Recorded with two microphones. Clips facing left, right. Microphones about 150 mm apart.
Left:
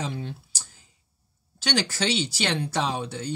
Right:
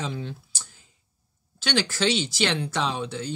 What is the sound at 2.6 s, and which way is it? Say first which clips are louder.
Speech: even; 45° left (ahead or behind).